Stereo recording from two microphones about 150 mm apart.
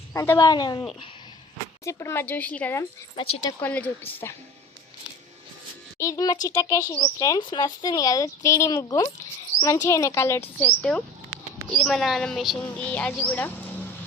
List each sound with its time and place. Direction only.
0.1 s speech: 20° left (ahead or behind)
3.2 s speech: 35° left (ahead or behind)
3.6 s speech: 10° left (ahead or behind)
6.0 s speech: 20° left (ahead or behind)